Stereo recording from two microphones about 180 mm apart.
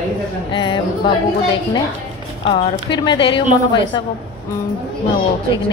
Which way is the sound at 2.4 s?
35° left (ahead or behind).